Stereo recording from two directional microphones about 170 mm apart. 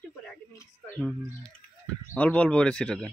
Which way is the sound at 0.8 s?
5° left (ahead or behind).